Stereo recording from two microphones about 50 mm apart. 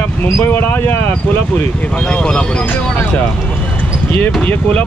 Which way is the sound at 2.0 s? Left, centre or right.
Left.